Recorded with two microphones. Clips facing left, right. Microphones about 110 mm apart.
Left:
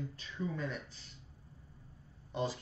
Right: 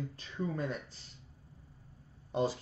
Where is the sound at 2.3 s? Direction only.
40° right (ahead or behind).